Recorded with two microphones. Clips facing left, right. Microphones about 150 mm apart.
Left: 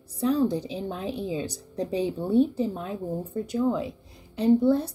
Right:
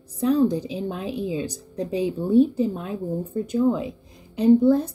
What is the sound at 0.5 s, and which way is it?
A woman's voice, 15° right (ahead or behind).